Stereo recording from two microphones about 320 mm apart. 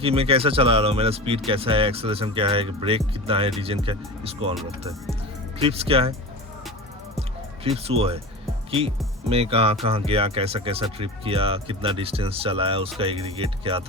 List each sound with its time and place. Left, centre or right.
0.0 s speech: centre
5.5 s speech: centre
7.2 s music: centre
9.3 s speech: centre